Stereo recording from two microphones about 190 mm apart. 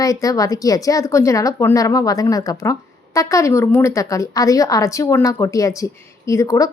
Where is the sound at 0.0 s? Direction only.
20° left (ahead or behind).